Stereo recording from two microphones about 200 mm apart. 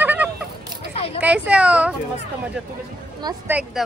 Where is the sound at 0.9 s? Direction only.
30° left (ahead or behind).